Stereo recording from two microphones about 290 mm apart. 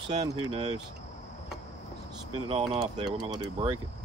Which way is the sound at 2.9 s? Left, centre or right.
Centre.